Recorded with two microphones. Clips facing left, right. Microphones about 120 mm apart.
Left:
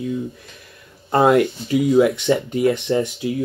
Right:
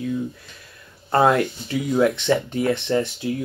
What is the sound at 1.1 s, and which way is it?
Speech, 15° left (ahead or behind).